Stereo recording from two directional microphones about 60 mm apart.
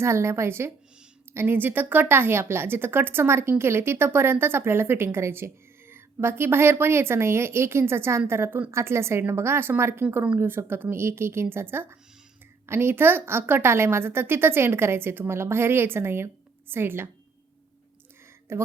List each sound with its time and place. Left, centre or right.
0.0 s a woman's voice: right
18.5 s a woman's voice: right